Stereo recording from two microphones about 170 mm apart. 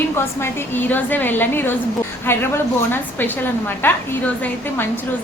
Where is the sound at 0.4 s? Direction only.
10° left (ahead or behind).